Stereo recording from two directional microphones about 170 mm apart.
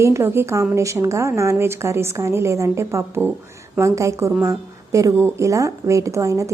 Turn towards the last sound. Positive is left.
turn(degrees=-20)  # may be behind; listen again after turning